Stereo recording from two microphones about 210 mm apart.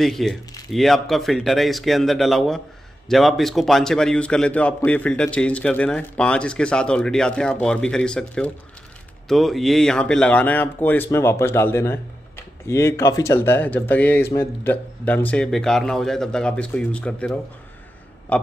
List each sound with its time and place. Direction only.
0.0 s a man's voice: centre (ahead or behind)